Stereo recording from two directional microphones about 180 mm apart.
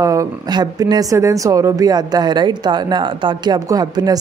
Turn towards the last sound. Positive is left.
turn(degrees=-20)  # may be behind; listen again after turning